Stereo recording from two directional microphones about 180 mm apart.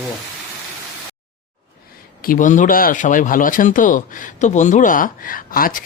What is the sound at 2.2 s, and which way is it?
Speech, 50° left (ahead or behind).